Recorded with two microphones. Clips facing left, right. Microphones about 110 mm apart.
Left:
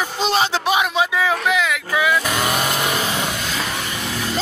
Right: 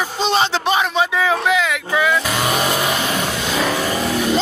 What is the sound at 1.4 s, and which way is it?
Vehicle, centre (ahead or behind).